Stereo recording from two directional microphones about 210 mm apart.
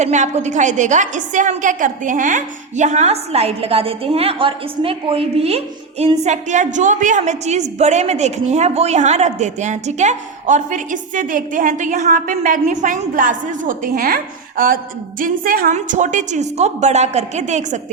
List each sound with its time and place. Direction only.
0.0 s a woman's voice: 35° right (ahead or behind)